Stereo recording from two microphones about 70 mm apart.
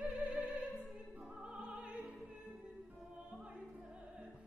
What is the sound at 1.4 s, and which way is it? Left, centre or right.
Music, centre.